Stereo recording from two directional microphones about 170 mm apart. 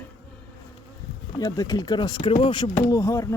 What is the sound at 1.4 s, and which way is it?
Speech, 20° left (ahead or behind).